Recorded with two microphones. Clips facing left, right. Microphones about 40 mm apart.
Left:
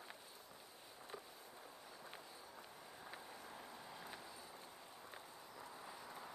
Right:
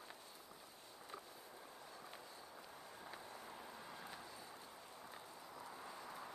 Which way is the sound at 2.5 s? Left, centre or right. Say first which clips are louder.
Right 1 dB; centre.